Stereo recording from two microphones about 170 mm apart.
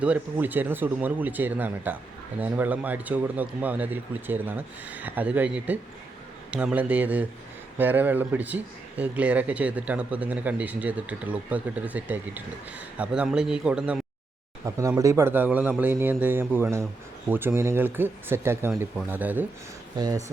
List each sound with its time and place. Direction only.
0.0 s a man's voice: 10° right (ahead or behind)
14.6 s speech: 20° right (ahead or behind)
20.0 s speech: 20° right (ahead or behind)